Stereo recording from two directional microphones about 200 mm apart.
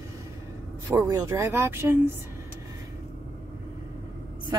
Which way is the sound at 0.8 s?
15° right (ahead or behind).